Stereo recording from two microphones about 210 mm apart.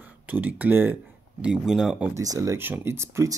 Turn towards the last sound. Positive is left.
turn(degrees=-15)  # may be behind; listen again after turning